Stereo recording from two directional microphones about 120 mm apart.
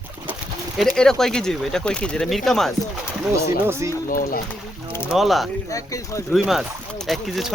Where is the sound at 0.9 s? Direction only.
5° left (ahead or behind).